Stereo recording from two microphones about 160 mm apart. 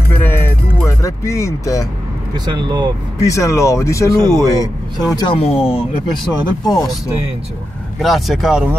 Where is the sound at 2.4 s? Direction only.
30° right (ahead or behind).